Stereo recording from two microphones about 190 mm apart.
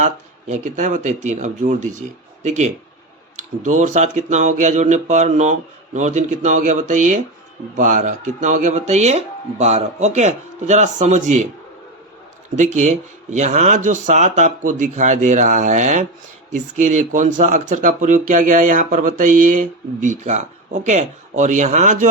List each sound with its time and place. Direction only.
0.0 s speech: 40° right (ahead or behind)
12.5 s speech: 40° right (ahead or behind)